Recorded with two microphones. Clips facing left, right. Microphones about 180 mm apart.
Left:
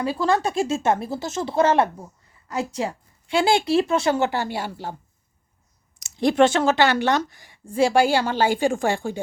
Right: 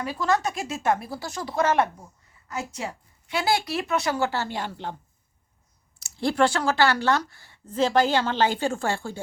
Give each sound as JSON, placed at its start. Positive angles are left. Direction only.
{"t": 0.0, "sound": "speech", "side_deg": 30}
{"t": 6.0, "sound": "speech", "side_deg": 20}